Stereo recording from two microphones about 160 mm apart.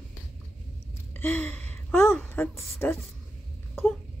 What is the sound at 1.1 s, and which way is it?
A woman's voice, 10° left (ahead or behind).